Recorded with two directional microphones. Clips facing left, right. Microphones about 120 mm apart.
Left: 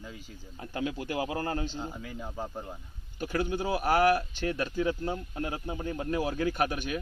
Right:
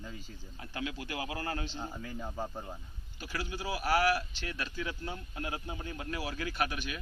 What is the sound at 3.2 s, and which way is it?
Speech, 55° left (ahead or behind).